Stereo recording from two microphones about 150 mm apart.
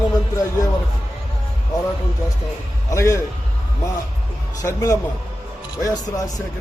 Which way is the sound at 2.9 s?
20° left (ahead or behind).